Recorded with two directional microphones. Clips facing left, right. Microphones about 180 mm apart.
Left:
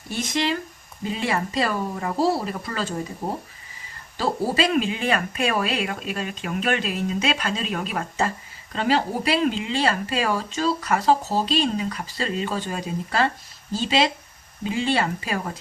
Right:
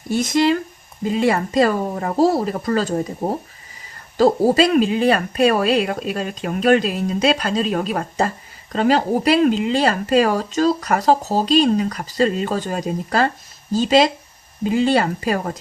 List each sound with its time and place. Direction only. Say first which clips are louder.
0.1 s speech: right 8 dB; 40° right (ahead or behind)